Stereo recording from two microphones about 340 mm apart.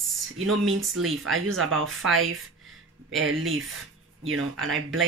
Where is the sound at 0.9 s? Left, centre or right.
Right.